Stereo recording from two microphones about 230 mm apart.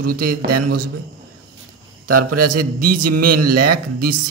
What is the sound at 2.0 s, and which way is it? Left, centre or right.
A man's voice, right.